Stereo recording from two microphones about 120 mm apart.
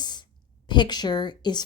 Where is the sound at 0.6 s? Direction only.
40° left (ahead or behind).